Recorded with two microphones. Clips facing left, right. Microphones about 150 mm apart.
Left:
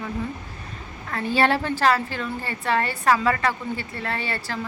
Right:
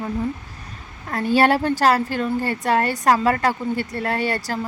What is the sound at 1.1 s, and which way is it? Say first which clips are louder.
A woman's voice: right 4 dB; 40° right (ahead or behind).